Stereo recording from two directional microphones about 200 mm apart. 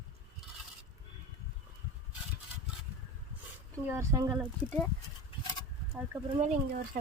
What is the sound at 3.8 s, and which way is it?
Speech, 15° right (ahead or behind).